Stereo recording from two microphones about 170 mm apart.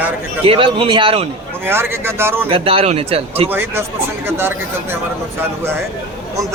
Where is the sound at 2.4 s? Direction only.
35° right (ahead or behind).